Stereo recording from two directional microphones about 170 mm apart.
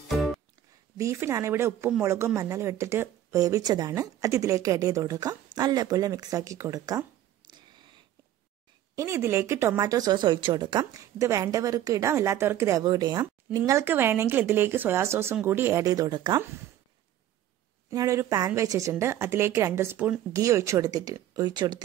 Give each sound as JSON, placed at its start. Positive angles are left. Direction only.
{"t": 0.9, "sound": "speech", "side_deg": -15}
{"t": 7.5, "sound": "a sound", "side_deg": -30}
{"t": 8.9, "sound": "speech", "side_deg": -15}
{"t": 17.8, "sound": "speech", "side_deg": -20}